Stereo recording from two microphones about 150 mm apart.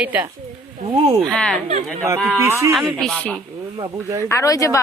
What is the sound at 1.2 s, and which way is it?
Speech, 5° left (ahead or behind).